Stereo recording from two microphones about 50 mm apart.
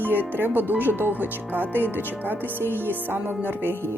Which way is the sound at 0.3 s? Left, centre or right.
Right.